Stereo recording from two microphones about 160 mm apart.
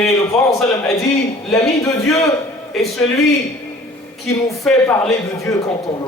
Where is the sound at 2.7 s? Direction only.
5° left (ahead or behind).